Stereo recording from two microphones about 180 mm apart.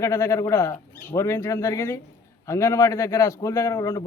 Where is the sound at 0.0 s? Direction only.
15° left (ahead or behind).